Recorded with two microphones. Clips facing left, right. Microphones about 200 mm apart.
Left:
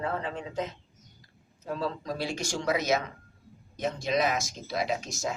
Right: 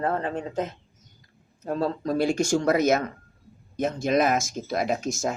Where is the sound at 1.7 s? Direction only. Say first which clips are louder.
Right 7 dB; 50° right (ahead or behind).